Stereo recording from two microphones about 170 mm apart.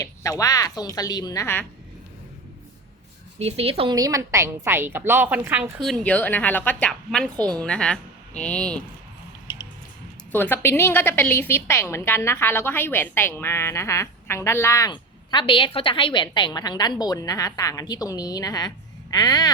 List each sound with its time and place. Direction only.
0.0 s a woman's voice: 20° left (ahead or behind)
3.3 s speech: 35° right (ahead or behind)
3.9 s a woman's voice: 20° right (ahead or behind)
5.8 s a woman's voice: 5° left (ahead or behind)
10.3 s a woman's voice: 10° left (ahead or behind)